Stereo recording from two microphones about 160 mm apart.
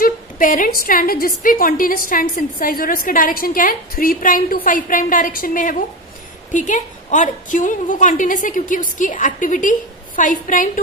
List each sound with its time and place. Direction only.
0.0 s a woman's voice: 55° left (ahead or behind)